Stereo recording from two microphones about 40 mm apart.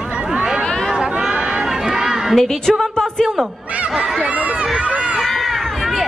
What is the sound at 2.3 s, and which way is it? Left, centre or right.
Speech, centre.